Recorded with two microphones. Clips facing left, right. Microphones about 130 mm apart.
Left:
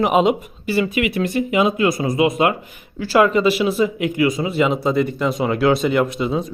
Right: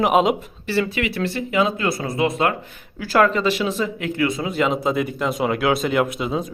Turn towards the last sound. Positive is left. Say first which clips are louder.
# left 2 dB
turn(degrees=0)  # may be behind; listen again after turning